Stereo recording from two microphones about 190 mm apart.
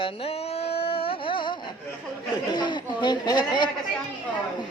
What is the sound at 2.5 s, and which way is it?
Speech, 25° left (ahead or behind).